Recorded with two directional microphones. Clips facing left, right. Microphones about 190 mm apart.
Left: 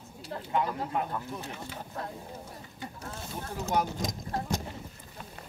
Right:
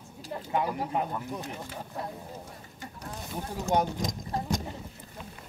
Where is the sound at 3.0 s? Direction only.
15° right (ahead or behind).